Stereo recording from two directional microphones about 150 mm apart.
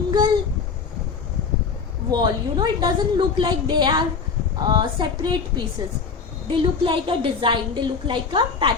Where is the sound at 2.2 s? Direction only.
30° right (ahead or behind).